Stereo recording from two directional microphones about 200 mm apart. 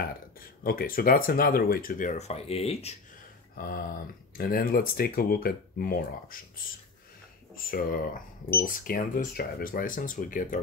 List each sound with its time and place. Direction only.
0.0 s speech: 45° left (ahead or behind); by 3.0 s 30° left (ahead or behind)
4.4 s speech: 45° left (ahead or behind)
7.5 s speech: 45° left (ahead or behind)